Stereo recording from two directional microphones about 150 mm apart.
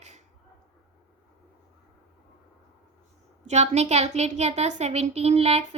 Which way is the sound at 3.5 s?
50° right (ahead or behind).